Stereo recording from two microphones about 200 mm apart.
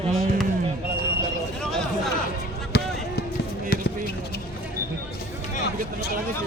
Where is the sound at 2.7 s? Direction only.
60° left (ahead or behind).